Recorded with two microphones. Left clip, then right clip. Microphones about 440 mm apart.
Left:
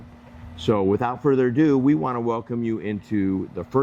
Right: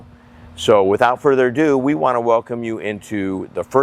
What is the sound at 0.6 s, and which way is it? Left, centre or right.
Speech, right.